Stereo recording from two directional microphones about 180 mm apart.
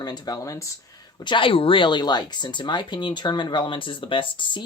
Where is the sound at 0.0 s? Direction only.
20° left (ahead or behind).